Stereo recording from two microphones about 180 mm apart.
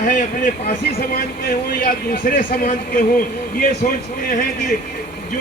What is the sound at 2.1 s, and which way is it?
Speech, 50° left (ahead or behind).